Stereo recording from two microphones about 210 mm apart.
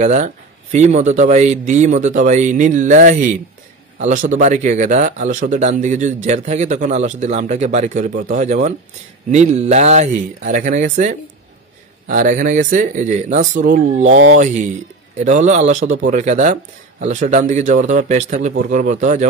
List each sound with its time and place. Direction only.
0.0 s speech: 35° right (ahead or behind)
14.1 s speech: 65° right (ahead or behind)
15.1 s speech: 35° right (ahead or behind)